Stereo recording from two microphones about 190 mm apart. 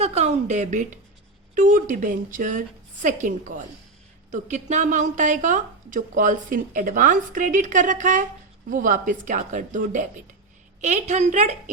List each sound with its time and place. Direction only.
0.0 s a woman's voice: 35° right (ahead or behind)